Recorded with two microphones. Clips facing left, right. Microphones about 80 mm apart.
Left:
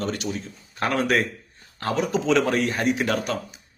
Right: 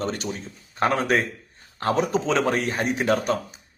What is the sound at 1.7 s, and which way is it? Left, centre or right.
A man's voice, right.